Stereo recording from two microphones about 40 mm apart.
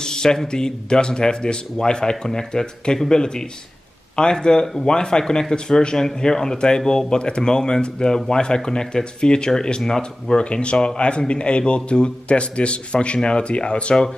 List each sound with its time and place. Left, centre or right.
0.0 s a man's voice: centre
10.4 s a man's voice: left